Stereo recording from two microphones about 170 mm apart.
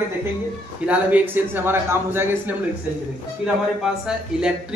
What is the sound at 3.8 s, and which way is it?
Speech, 5° right (ahead or behind).